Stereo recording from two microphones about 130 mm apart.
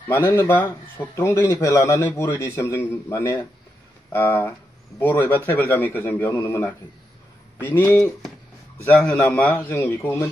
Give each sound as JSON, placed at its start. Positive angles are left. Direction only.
{"t": 0.1, "sound": "speech", "side_deg": 20}